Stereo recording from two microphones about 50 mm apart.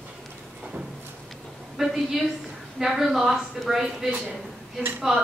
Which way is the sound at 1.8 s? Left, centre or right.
Centre.